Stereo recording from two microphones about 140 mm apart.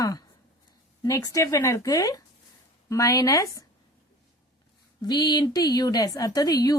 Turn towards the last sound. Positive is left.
turn(degrees=25)  # may be behind; listen again after turning